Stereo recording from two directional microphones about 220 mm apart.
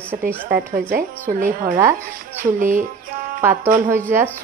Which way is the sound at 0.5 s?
40° right (ahead or behind).